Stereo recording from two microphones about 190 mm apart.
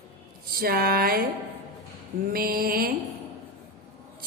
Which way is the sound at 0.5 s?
50° right (ahead or behind).